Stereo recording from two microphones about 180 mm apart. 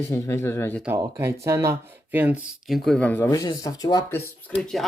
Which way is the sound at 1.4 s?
15° right (ahead or behind).